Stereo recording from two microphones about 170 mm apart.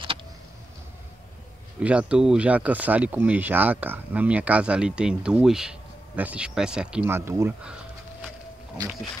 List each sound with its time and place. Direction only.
1.8 s speech: 5° right (ahead or behind)